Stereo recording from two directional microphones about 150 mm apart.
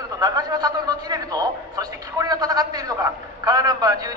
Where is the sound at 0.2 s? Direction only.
25° right (ahead or behind).